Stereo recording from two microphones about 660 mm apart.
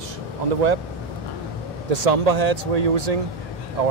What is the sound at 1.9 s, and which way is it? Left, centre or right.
Speech, right.